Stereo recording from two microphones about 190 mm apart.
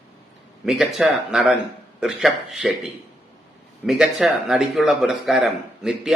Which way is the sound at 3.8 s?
Centre (ahead or behind).